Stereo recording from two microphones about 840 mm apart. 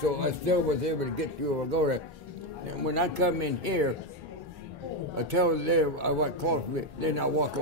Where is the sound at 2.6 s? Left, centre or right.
Right.